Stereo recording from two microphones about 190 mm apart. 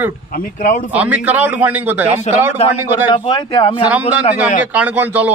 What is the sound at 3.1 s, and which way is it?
Speech, 25° left (ahead or behind).